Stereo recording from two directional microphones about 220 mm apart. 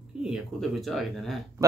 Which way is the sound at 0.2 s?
Centre (ahead or behind).